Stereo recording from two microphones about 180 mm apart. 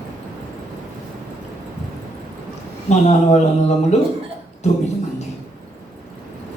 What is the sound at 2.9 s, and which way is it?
Speech, 40° left (ahead or behind).